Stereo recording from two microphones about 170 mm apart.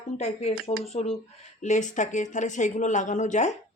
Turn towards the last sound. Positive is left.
turn(degrees=45)  # may be behind; listen again after turning